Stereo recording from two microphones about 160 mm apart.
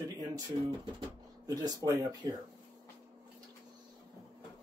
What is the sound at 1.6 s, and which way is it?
Speech, 25° right (ahead or behind).